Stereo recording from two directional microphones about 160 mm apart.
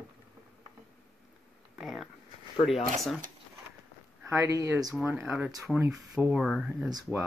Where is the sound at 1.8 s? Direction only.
Centre (ahead or behind).